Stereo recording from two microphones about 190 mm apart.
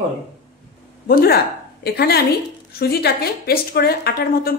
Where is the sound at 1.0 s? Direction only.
50° left (ahead or behind).